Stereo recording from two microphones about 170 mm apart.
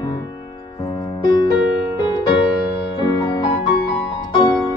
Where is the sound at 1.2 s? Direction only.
25° left (ahead or behind).